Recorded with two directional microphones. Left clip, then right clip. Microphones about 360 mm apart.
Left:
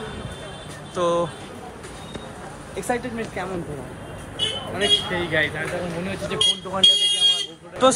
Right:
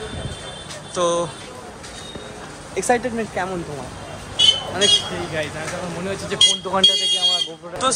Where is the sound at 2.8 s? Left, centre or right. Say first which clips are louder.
Right 6 dB; centre.